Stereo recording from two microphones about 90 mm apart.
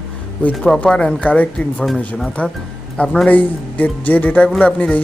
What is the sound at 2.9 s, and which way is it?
A woman's voice, 15° left (ahead or behind).